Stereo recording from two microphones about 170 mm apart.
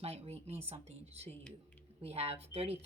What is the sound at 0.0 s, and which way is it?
Speech, 35° right (ahead or behind).